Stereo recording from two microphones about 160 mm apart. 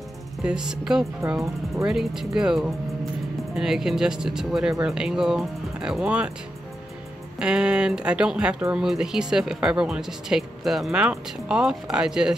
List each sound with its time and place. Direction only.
0.4 s speech: 5° right (ahead or behind)
1.2 s speech: 20° right (ahead or behind)
1.9 s speech: 5° right (ahead or behind)
7.3 s speech: 5° right (ahead or behind)